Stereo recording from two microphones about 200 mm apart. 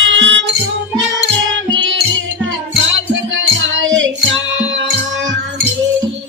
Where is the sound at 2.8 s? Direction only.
70° right (ahead or behind).